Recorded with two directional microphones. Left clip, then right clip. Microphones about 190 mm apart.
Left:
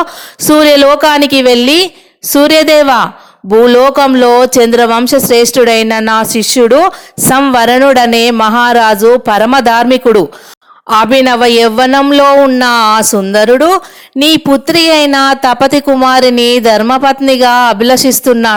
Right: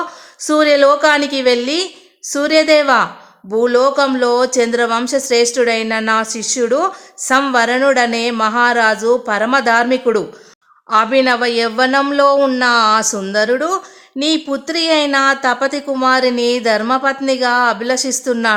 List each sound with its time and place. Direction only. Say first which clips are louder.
0.4 s speech: left 6 dB; 40° left (ahead or behind)